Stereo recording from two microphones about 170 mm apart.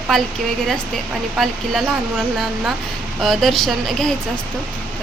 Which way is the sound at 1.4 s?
Centre (ahead or behind).